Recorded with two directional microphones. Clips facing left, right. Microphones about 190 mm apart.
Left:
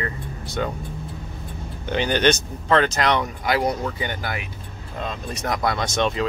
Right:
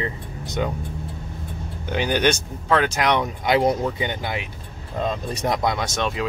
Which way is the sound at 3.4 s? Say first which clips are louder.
Right 3 dB; 25° right (ahead or behind).